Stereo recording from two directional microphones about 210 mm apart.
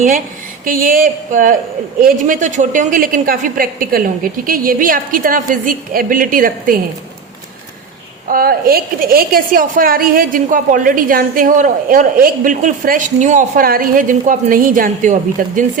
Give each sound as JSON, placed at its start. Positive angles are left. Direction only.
{"t": 0.6, "sound": "a woman's voice", "side_deg": -40}
{"t": 8.3, "sound": "a woman's voice", "side_deg": -45}